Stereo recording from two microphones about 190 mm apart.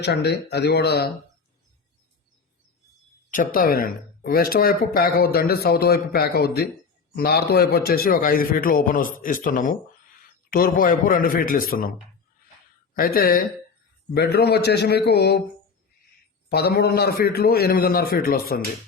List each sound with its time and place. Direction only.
0.0 s a man's voice: 60° left (ahead or behind)
3.2 s speech: 45° left (ahead or behind)
13.0 s a man's voice: 50° left (ahead or behind)
16.5 s speech: 55° left (ahead or behind)